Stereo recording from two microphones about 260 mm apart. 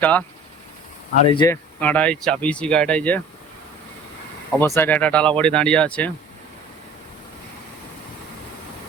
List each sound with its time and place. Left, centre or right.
0.0 s speech: centre
1.3 s speech: centre
1.8 s speech: centre
4.6 s speech: centre